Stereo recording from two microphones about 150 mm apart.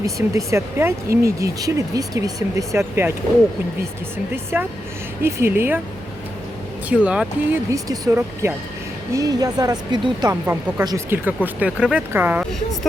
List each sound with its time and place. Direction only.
0.0 s speech: 20° right (ahead or behind)
4.5 s speech: 15° right (ahead or behind)
6.8 s speech: 10° right (ahead or behind)
7.7 s speech: 20° right (ahead or behind)
10.4 s speech: 15° right (ahead or behind)